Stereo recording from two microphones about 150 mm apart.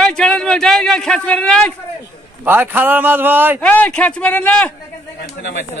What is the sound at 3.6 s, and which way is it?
A man's voice, 10° left (ahead or behind).